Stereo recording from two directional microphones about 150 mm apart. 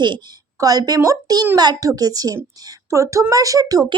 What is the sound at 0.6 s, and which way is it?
A child's voice, 25° right (ahead or behind).